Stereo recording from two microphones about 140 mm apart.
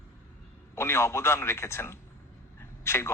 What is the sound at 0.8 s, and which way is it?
A man's voice, 20° left (ahead or behind).